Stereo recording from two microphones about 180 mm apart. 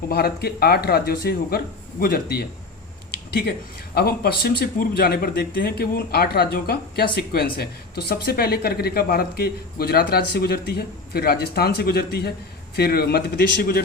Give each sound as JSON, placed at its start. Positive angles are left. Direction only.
{"t": 0.1, "sound": "speech", "side_deg": 60}
{"t": 3.1, "sound": "a sound", "side_deg": 60}
{"t": 3.9, "sound": "speech", "side_deg": 60}